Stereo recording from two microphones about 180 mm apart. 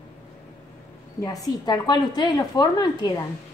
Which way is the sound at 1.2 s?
20° left (ahead or behind).